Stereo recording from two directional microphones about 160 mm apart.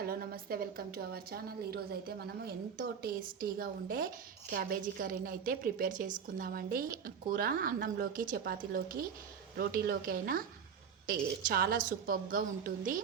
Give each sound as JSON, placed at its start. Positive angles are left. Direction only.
{"t": 0.0, "sound": "a woman's voice", "side_deg": -70}